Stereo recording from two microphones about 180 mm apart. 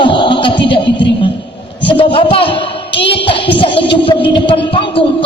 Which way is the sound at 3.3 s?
30° left (ahead or behind).